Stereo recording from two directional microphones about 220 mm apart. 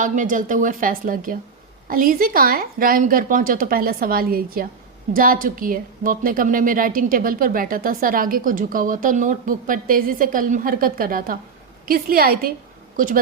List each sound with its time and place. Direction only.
0.0 s a woman's voice: 35° right (ahead or behind)